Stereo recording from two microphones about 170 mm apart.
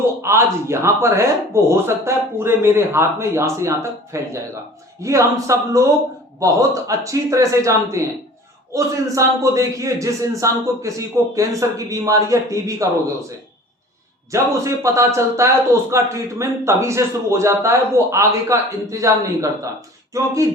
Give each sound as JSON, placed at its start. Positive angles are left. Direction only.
{"t": 0.2, "sound": "a man's voice", "side_deg": -15}
{"t": 14.3, "sound": "a man's voice", "side_deg": -20}